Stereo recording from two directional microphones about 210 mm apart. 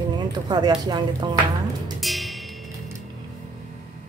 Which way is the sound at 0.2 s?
20° right (ahead or behind).